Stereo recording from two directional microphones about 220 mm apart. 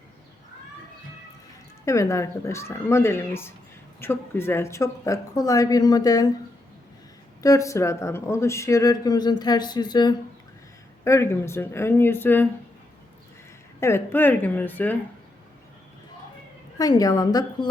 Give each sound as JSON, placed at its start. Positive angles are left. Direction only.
{"t": 1.8, "sound": "speech", "side_deg": 15}
{"t": 7.4, "sound": "speech", "side_deg": 15}
{"t": 13.7, "sound": "speech", "side_deg": 10}
{"t": 16.7, "sound": "speech", "side_deg": 15}